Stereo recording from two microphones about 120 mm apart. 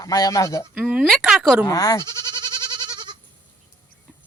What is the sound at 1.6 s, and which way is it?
Speech, 30° left (ahead or behind).